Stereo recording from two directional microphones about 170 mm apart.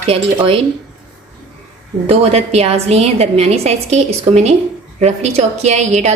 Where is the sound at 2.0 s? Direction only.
40° right (ahead or behind).